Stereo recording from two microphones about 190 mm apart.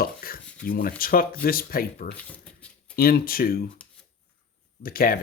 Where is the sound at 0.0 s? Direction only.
50° left (ahead or behind).